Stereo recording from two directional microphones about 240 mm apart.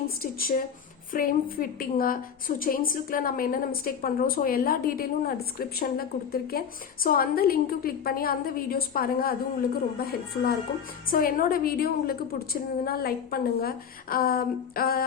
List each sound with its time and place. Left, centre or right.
0.2 s a woman's voice: left